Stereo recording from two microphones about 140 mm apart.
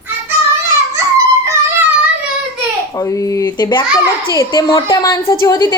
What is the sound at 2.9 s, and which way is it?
A woman's voice, 25° left (ahead or behind).